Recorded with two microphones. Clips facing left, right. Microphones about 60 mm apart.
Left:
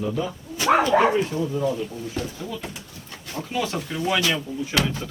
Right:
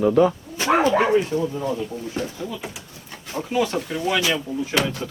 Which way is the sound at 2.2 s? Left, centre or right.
Right.